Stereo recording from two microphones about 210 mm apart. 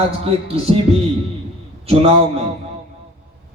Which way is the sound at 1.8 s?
25° right (ahead or behind).